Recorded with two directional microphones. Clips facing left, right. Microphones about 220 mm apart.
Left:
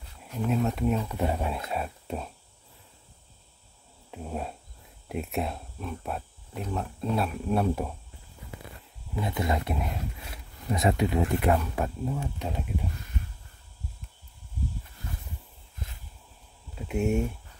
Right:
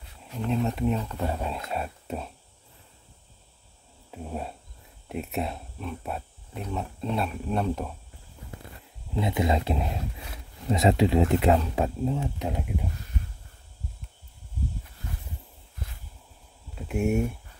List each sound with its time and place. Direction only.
0.3 s speech: centre (ahead or behind)
1.0 s speech: 15° left (ahead or behind)
1.7 s speech: centre (ahead or behind)
4.1 s speech: centre (ahead or behind)
9.2 s speech: 20° right (ahead or behind)
12.4 s speech: 10° right (ahead or behind)
16.7 s speech: centre (ahead or behind)